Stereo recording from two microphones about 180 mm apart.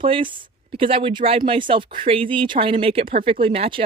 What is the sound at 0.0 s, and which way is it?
A woman's voice, 30° right (ahead or behind).